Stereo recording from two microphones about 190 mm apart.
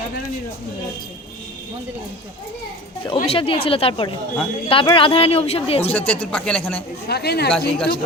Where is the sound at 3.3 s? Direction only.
30° left (ahead or behind).